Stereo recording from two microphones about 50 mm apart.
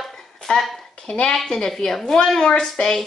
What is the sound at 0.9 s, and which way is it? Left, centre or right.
Speech, left.